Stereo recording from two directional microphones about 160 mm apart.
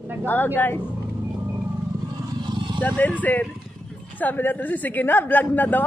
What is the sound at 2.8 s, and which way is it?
A woman's voice, 10° left (ahead or behind).